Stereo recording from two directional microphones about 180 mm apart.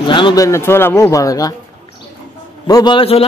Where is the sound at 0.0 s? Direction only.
25° left (ahead or behind).